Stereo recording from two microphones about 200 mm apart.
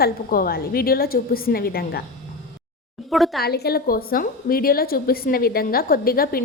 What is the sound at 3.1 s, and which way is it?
Speech, centre (ahead or behind).